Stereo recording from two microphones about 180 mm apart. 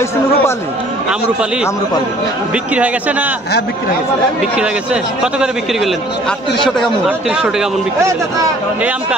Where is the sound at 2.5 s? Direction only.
10° right (ahead or behind).